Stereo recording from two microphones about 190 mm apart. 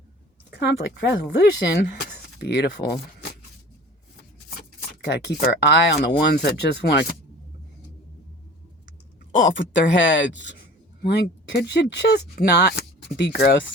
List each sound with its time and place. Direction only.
0.9 s speech: 60° left (ahead or behind)
5.0 s speech: 60° left (ahead or behind)
9.6 s speech: 70° left (ahead or behind)